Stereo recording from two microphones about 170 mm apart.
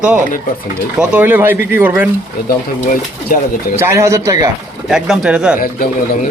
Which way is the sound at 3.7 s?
15° right (ahead or behind).